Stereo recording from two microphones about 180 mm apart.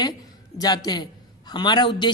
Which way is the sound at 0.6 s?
20° left (ahead or behind).